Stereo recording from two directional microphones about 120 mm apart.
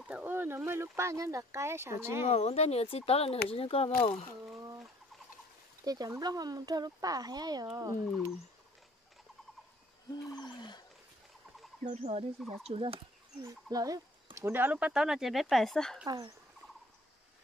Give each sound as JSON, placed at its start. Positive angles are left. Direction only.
{"t": 0.0, "sound": "a sound", "side_deg": -15}
{"t": 0.7, "sound": "speech", "side_deg": -25}
{"t": 2.2, "sound": "speech", "side_deg": 65}
{"t": 5.9, "sound": "speech", "side_deg": -30}
{"t": 10.3, "sound": "a sound", "side_deg": 35}
{"t": 11.8, "sound": "speech", "side_deg": -65}
{"t": 13.4, "sound": "speech", "side_deg": -30}